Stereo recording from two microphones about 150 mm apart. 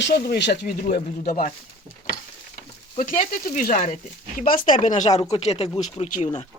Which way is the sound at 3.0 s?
65° left (ahead or behind).